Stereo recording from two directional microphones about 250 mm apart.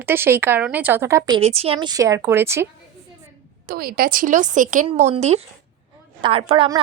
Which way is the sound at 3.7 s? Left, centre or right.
Right.